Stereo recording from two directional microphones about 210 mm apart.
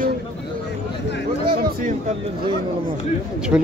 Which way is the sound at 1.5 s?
45° right (ahead or behind).